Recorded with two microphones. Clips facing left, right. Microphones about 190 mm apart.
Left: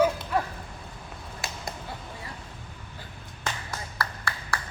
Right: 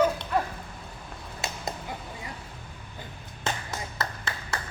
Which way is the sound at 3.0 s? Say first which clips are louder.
Right 2 dB; 20° right (ahead or behind).